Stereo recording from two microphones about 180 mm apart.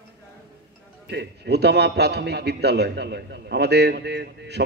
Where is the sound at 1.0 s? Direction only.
65° right (ahead or behind).